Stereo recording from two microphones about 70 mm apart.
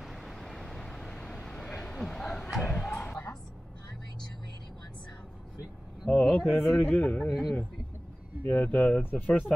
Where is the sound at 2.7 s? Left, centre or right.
Centre.